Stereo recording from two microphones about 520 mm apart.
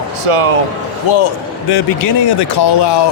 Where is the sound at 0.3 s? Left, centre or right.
Right.